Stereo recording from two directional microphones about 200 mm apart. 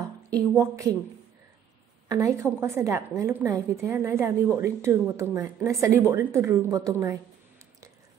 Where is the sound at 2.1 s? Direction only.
15° right (ahead or behind).